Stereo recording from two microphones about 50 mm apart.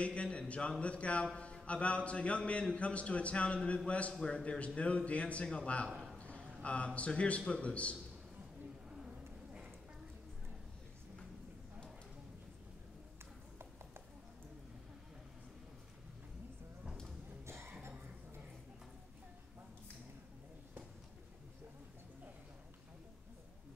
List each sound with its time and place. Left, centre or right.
0.0 s a man's voice: left
6.1 s a sound: left
6.6 s a man's voice: left